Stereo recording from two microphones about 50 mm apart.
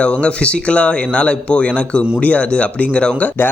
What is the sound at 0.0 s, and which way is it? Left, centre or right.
Speech, left.